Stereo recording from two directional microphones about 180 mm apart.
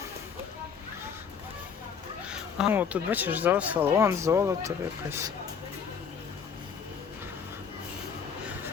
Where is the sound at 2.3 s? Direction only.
5° right (ahead or behind).